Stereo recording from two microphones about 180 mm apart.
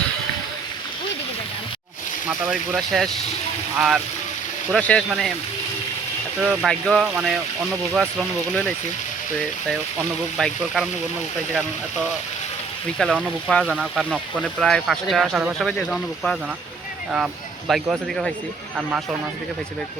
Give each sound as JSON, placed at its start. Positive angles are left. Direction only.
{"t": 2.2, "sound": "speech", "side_deg": -5}
{"t": 6.4, "sound": "speech", "side_deg": -5}
{"t": 10.3, "sound": "speech", "side_deg": 5}
{"t": 13.0, "sound": "speech", "side_deg": 5}
{"t": 17.7, "sound": "speech", "side_deg": 0}